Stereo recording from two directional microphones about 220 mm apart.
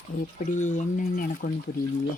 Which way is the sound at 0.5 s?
35° left (ahead or behind).